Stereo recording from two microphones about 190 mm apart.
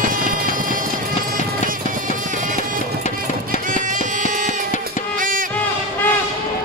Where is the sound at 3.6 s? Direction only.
45° right (ahead or behind).